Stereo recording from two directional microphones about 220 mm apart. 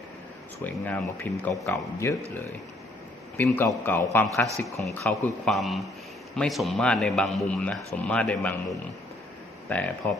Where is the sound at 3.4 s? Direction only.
10° left (ahead or behind).